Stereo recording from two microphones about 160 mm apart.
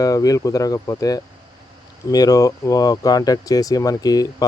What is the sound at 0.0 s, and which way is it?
Speech, 20° left (ahead or behind).